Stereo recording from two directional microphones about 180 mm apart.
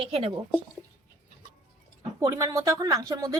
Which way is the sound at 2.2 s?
20° right (ahead or behind).